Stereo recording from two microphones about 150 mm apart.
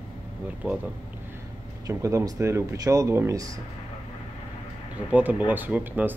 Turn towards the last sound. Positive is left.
turn(degrees=-10)  # may be behind; listen again after turning